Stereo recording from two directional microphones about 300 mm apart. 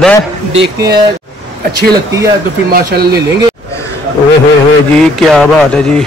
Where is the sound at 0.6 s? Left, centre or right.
Right.